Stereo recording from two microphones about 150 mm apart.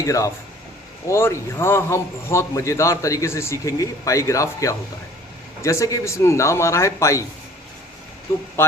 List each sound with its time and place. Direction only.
0.0 s a man's voice: 20° left (ahead or behind)
8.6 s speech: 15° left (ahead or behind)